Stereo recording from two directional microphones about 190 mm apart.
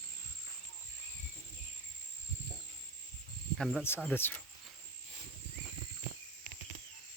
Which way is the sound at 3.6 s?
Centre (ahead or behind).